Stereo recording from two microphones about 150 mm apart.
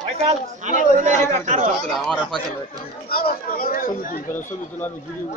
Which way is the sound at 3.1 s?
85° left.